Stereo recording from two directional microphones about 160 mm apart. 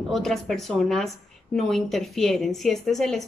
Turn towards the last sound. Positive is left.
turn(degrees=0)  # may be behind; listen again after turning